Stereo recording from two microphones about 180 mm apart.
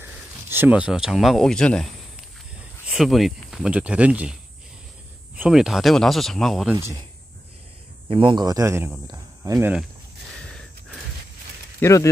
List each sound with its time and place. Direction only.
0.0 s speech: 10° right (ahead or behind); by 1.9 s 5° left (ahead or behind)
2.9 s speech: centre (ahead or behind)
8.1 s speech: 25° right (ahead or behind)
11.8 s speech: 15° left (ahead or behind)